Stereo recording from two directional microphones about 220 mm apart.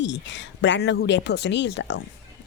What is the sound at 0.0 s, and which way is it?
Speech, 55° left (ahead or behind).